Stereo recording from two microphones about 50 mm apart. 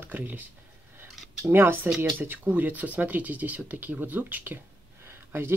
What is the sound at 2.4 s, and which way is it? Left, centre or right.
Speech, right.